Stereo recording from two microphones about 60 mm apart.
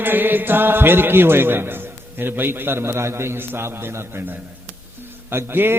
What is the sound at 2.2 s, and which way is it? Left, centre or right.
A man's voice, right.